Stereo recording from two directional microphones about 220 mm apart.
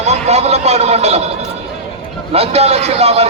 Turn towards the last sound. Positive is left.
turn(degrees=-30)  # may be behind; listen again after turning